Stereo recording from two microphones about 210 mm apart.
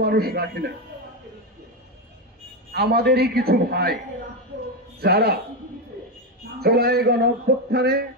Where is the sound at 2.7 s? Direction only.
50° right (ahead or behind).